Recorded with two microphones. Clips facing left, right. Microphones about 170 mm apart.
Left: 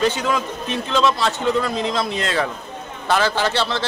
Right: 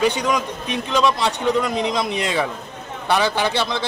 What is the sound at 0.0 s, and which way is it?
A man's voice, 15° right (ahead or behind).